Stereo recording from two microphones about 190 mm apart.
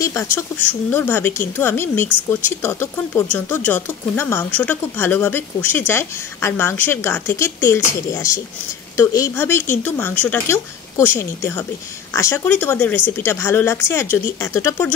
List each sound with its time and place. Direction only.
0.0 s speech: 15° left (ahead or behind)